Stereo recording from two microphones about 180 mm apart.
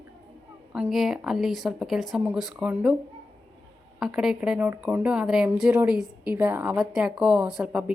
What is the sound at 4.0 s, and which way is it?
A woman's voice, 5° right (ahead or behind).